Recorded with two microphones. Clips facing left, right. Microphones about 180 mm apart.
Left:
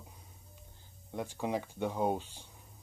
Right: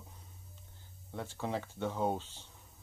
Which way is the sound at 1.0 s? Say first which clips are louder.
Left 3 dB; 15° left (ahead or behind).